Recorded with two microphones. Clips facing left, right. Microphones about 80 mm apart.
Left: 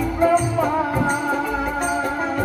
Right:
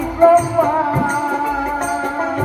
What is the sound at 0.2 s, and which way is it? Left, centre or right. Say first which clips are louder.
Music: right 8 dB; right.